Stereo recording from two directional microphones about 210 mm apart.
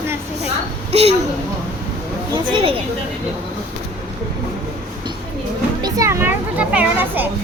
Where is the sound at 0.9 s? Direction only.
30° right (ahead or behind).